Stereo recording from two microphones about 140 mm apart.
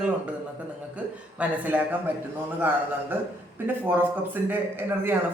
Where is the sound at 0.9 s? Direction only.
10° right (ahead or behind).